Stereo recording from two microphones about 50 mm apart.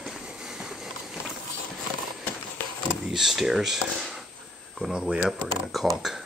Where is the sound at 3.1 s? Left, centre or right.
Centre.